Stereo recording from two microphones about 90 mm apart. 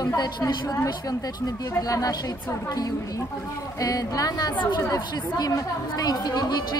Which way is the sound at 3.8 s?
45° left (ahead or behind).